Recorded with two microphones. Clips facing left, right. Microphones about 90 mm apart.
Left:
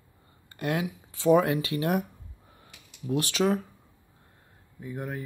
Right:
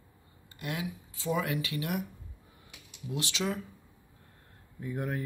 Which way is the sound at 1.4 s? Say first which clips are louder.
Left 6 dB; 35° left (ahead or behind).